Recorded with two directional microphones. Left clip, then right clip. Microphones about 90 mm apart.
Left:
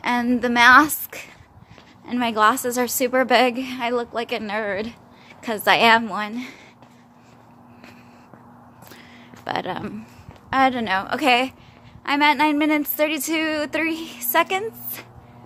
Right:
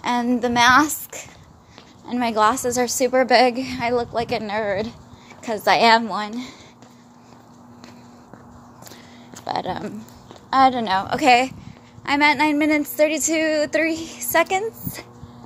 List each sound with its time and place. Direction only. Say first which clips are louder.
0.0 s a woman's voice: even; 30° left (ahead or behind)
2.2 s a woman's voice: even; 15° left (ahead or behind)
2.5 s a woman's voice: right 2 dB; 30° left (ahead or behind)
5.4 s a woman's voice: right 1 dB; 40° left (ahead or behind)
5.7 s a woman's voice: even; 20° left (ahead or behind)
9.4 s speech: right 1 dB; 55° left (ahead or behind)
10.5 s a woman's voice: right 3 dB; 35° left (ahead or behind)
10.9 s a woman's voice: right 3 dB; 15° left (ahead or behind)